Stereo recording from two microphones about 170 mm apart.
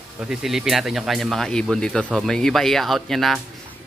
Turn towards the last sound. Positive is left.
turn(degrees=0)  # may be behind; listen again after turning